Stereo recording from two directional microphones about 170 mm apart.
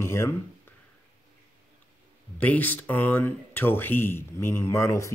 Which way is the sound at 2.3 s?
10° left (ahead or behind).